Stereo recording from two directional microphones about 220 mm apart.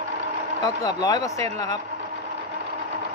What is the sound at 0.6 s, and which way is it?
Speech, 15° left (ahead or behind).